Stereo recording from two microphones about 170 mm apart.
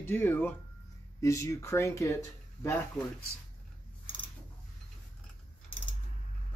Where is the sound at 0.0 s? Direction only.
10° left (ahead or behind).